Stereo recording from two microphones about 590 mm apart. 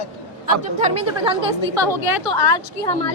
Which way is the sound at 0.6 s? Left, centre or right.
Centre.